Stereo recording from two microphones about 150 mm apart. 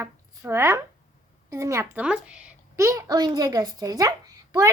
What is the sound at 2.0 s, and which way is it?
Speech, 5° right (ahead or behind).